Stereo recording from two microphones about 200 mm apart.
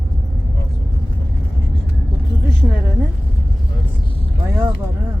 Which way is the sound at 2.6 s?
15° left (ahead or behind).